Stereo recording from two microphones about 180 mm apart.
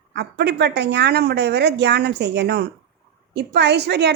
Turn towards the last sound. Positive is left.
turn(degrees=-70)  # may be behind; listen again after turning